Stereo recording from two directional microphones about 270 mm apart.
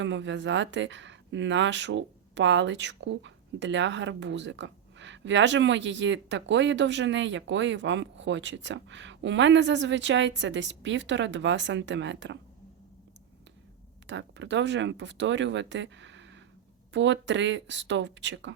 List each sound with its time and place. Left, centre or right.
0.0 s speech: right
14.1 s speech: right